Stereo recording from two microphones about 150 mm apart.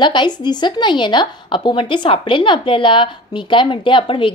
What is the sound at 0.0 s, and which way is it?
Speech, 30° left (ahead or behind).